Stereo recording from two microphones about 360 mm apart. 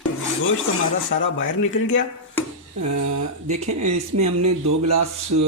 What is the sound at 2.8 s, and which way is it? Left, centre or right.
Speech, right.